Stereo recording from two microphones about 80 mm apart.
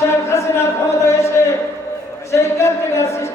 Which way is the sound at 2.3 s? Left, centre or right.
Left.